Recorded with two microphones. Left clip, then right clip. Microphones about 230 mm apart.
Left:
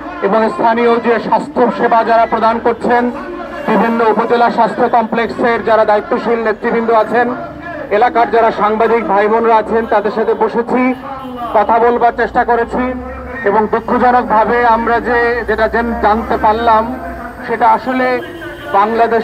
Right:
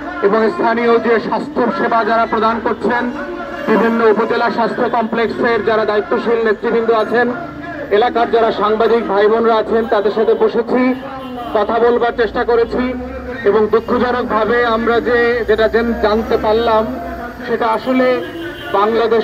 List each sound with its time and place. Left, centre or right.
0.2 s a man's voice: left